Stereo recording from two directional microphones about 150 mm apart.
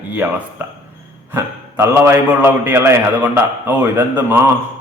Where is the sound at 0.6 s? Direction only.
15° right (ahead or behind).